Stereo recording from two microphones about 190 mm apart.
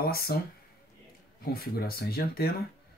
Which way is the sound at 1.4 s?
55° left (ahead or behind).